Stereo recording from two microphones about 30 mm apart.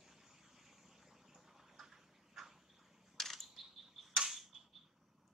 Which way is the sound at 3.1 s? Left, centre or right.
Centre.